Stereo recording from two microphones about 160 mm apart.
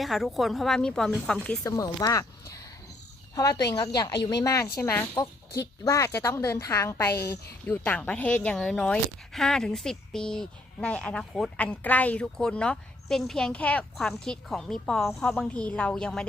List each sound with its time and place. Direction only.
0.0 s speech: centre (ahead or behind)
1.6 s speech: 25° left (ahead or behind)
3.3 s speech: 25° left (ahead or behind); by 16.2 s 5° left (ahead or behind)